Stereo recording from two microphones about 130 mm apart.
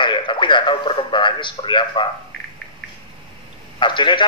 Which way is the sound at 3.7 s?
40° left (ahead or behind).